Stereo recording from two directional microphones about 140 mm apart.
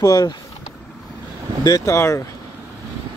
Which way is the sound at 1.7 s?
25° left (ahead or behind).